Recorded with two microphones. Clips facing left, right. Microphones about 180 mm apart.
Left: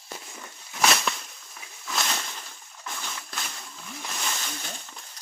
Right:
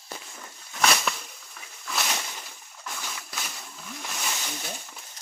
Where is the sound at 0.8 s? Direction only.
Centre (ahead or behind).